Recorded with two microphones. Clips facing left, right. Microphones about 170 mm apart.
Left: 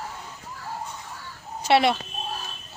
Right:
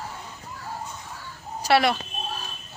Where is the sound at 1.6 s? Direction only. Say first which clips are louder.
Left 1 dB; 25° left (ahead or behind).